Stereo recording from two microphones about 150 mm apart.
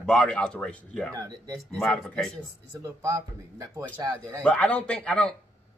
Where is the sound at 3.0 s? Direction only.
15° right (ahead or behind).